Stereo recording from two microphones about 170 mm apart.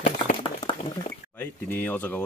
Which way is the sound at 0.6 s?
25° left (ahead or behind).